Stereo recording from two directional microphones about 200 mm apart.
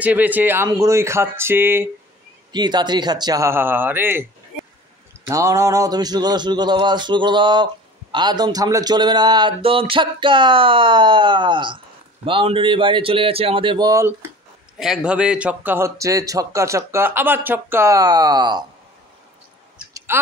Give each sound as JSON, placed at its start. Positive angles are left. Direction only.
{"t": 0.0, "sound": "a man's voice", "side_deg": -10}
{"t": 2.5, "sound": "a man's voice", "side_deg": -20}
{"t": 14.8, "sound": "a man's voice", "side_deg": -5}
{"t": 20.1, "sound": "speech", "side_deg": -10}